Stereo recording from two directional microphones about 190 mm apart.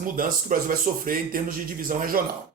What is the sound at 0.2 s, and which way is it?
Speech, 45° right (ahead or behind).